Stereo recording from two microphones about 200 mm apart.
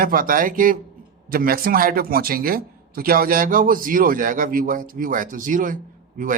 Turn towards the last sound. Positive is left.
turn(degrees=-40)  # may be behind; listen again after turning